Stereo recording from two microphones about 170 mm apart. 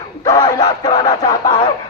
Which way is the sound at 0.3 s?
20° left (ahead or behind).